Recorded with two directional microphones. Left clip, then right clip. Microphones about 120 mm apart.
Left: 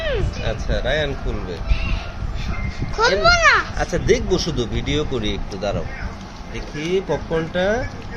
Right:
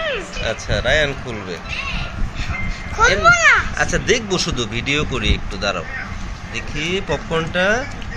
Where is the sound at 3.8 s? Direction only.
20° left (ahead or behind).